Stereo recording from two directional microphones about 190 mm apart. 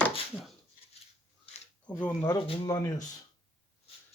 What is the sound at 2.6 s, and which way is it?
Speech, 20° left (ahead or behind).